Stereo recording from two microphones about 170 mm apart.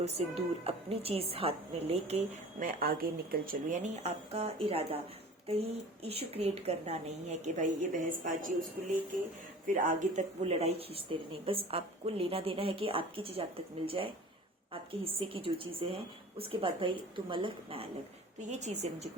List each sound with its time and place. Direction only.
0.0 s speech: 35° right (ahead or behind)
2.6 s speech: 55° right (ahead or behind)
4.0 s speech: 40° right (ahead or behind)
9.6 s speech: 50° right (ahead or behind); by 17.8 s 30° right (ahead or behind)
18.3 s speech: 45° right (ahead or behind)